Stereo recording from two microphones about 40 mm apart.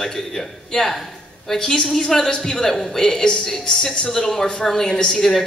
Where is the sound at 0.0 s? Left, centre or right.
Centre.